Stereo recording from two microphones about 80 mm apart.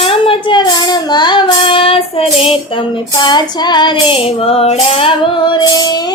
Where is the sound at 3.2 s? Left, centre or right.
Left.